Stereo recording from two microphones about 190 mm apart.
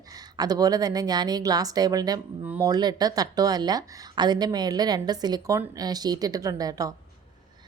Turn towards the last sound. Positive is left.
turn(degrees=-20)  # may be behind; listen again after turning